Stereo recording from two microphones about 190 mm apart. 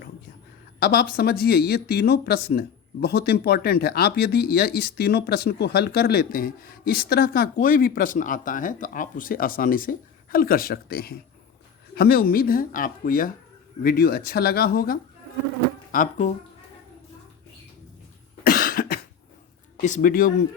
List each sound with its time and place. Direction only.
0.8 s speech: 50° left (ahead or behind)
18.4 s cough: 50° left (ahead or behind)
19.7 s speech: 45° left (ahead or behind)